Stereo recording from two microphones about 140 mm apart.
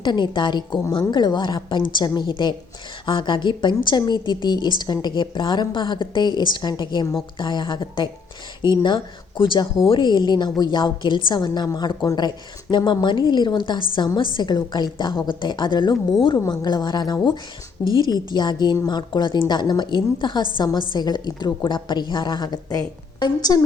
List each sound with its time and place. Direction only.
0.0 s a woman's voice: 35° left (ahead or behind)
9.4 s a woman's voice: 35° left (ahead or behind)